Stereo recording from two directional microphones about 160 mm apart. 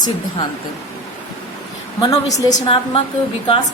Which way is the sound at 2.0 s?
20° left (ahead or behind).